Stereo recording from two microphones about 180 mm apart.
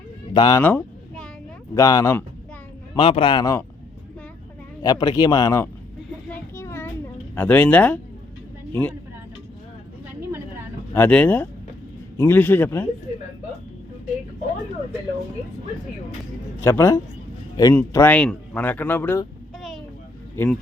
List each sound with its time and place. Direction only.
0.3 s speech: 20° left (ahead or behind)
0.6 s a sound: 10° left (ahead or behind)
1.7 s speech: 20° left (ahead or behind)
2.9 s speech: 30° left (ahead or behind)
4.8 s speech: 20° left (ahead or behind)
6.3 s a sound: 15° left (ahead or behind)
7.3 s speech: 10° left (ahead or behind)
10.2 s vehicle: 15° right (ahead or behind)
10.9 s speech: 10° left (ahead or behind)
16.6 s speech: 15° left (ahead or behind)
17.9 s speech: 10° left (ahead or behind)
19.5 s a sound: centre (ahead or behind)
20.3 s speech: 10° left (ahead or behind)